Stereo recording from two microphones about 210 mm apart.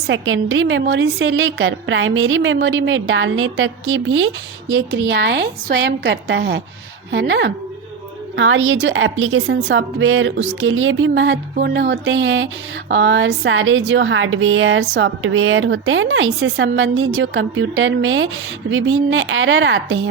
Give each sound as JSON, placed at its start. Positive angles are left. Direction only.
{"t": 0.1, "sound": "a woman's voice", "side_deg": -65}